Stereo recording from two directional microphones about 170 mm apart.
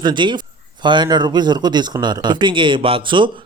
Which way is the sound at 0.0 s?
25° right (ahead or behind).